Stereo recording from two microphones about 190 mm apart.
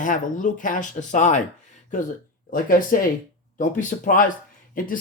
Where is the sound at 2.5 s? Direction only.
50° left (ahead or behind).